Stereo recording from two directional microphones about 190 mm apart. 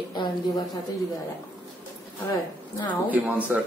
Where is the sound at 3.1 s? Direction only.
10° right (ahead or behind).